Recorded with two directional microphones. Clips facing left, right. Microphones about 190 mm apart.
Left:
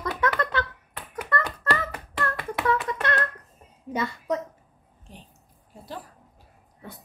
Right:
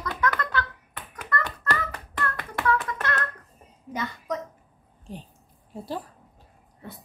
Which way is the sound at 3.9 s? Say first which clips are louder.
Left 4 dB; 25° left (ahead or behind).